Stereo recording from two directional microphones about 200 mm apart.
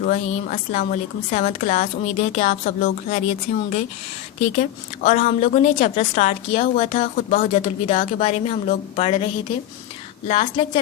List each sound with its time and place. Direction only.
0.0 s a woman's voice: 40° left (ahead or behind)